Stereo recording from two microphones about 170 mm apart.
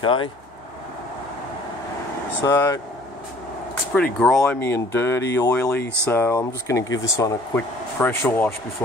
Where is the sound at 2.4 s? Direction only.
20° left (ahead or behind).